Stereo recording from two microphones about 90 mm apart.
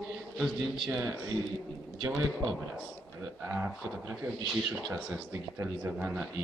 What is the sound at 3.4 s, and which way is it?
Speech, 15° right (ahead or behind).